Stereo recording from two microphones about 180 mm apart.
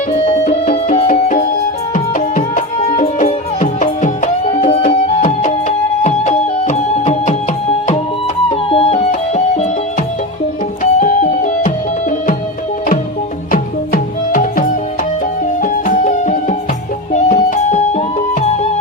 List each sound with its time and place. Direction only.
0.4 s music: 40° left (ahead or behind)
8.4 s music: 35° left (ahead or behind)
11.0 s music: 45° left (ahead or behind)
13.5 s music: 50° left (ahead or behind)